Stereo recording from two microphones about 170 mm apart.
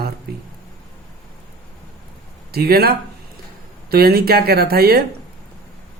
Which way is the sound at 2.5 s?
65° right (ahead or behind).